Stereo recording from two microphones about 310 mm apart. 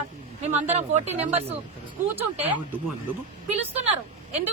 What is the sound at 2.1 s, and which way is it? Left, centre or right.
Speech, centre.